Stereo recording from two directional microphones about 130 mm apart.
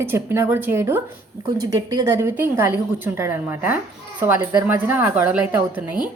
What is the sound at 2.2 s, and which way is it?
A woman's voice, 20° right (ahead or behind).